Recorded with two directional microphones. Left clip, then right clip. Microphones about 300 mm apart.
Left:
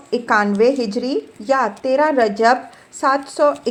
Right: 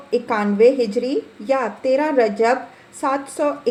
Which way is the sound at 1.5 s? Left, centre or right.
Centre.